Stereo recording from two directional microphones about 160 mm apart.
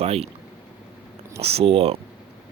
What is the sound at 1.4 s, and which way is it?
Speech, 40° right (ahead or behind).